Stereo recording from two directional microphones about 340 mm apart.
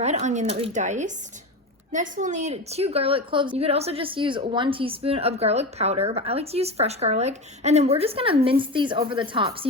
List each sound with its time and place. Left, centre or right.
0.0 s a woman's voice: right